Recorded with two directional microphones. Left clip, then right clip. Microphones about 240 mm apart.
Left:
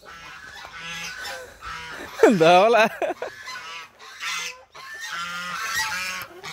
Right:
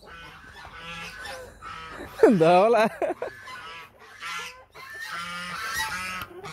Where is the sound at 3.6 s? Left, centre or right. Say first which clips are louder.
Left 4 dB; left.